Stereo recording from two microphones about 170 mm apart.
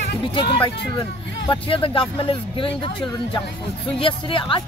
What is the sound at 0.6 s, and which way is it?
Speech, 25° left (ahead or behind).